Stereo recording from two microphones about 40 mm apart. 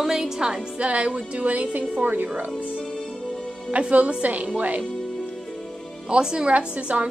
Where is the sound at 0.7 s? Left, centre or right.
Right.